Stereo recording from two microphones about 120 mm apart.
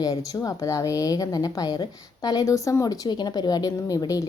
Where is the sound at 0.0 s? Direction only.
30° left (ahead or behind).